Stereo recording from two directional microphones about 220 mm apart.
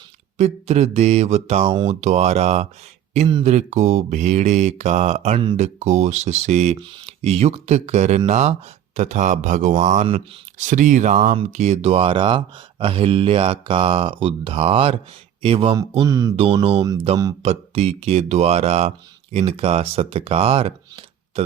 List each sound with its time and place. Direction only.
0.3 s speech: 30° right (ahead or behind)
1.9 s mantra: 30° right (ahead or behind)
7.2 s speech: 25° right (ahead or behind)
9.0 s mantra: 30° right (ahead or behind)
12.8 s speech: 25° right (ahead or behind)
16.0 s a sound: 15° right (ahead or behind)
16.3 s speech: 25° right (ahead or behind)